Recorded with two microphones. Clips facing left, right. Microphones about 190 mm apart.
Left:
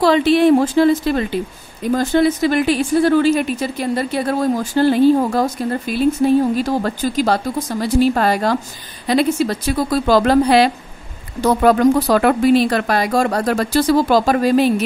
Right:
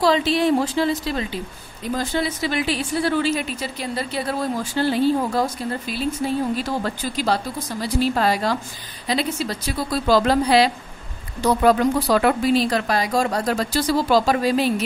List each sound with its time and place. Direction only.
0.0 s speech: 60° left (ahead or behind)